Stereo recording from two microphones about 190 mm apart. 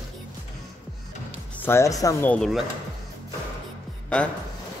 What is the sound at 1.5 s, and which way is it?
Speech, 10° left (ahead or behind).